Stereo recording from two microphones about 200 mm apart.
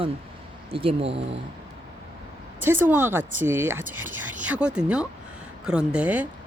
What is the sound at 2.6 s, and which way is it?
Speech, 10° right (ahead or behind).